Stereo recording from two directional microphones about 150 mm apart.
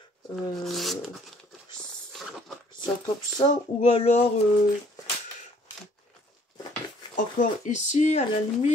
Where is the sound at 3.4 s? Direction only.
45° left (ahead or behind).